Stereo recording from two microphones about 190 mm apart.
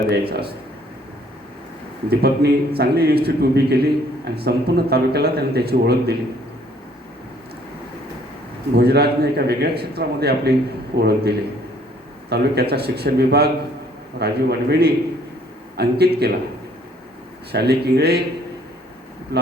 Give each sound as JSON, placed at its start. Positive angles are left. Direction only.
{"t": 0.1, "sound": "a man's voice", "side_deg": -55}
{"t": 2.0, "sound": "a man's voice", "side_deg": -55}
{"t": 8.7, "sound": "a man's voice", "side_deg": -60}
{"t": 17.5, "sound": "a man's voice", "side_deg": -60}